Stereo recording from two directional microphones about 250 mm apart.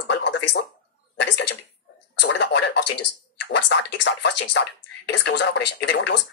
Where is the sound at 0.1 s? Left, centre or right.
Left.